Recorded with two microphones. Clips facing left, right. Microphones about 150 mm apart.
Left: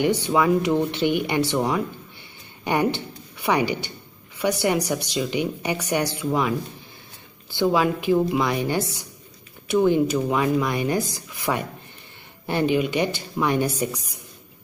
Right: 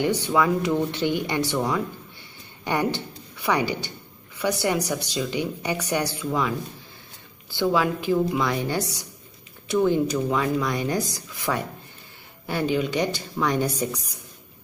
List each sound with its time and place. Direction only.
0.3 s speech: 15° left (ahead or behind)
7.5 s speech: 15° left (ahead or behind)